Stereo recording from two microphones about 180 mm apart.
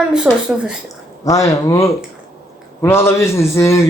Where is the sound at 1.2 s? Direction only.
20° left (ahead or behind).